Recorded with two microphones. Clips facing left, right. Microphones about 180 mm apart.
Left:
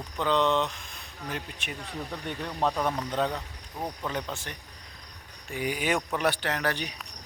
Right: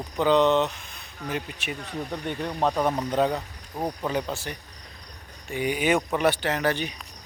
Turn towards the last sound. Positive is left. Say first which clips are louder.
# right 4 dB
turn(degrees=0)  # may be behind; listen again after turning